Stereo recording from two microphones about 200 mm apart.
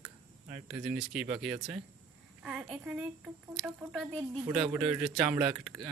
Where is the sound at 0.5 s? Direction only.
5° right (ahead or behind).